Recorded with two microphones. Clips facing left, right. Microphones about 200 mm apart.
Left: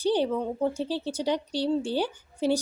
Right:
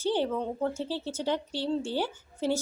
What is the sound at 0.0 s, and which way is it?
A woman's voice, 15° left (ahead or behind).